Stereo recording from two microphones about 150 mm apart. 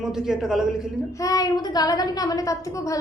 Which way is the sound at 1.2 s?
25° left (ahead or behind).